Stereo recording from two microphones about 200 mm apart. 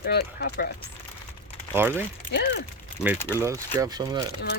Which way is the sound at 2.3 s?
60° left (ahead or behind).